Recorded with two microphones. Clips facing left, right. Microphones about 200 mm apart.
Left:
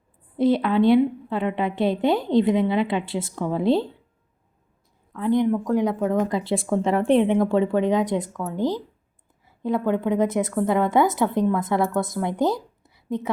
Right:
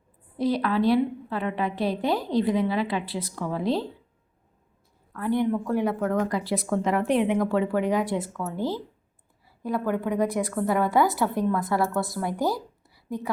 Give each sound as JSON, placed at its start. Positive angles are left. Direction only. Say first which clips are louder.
{"t": 0.3, "sound": "speech", "louder": "left 5 dB", "side_deg": 25}
{"t": 5.1, "sound": "a woman's voice", "louder": "left 4 dB", "side_deg": 20}